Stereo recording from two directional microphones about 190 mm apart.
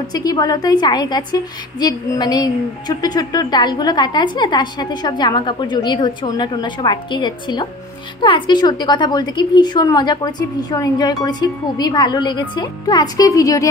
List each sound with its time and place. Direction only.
0.1 s a woman's voice: 20° left (ahead or behind)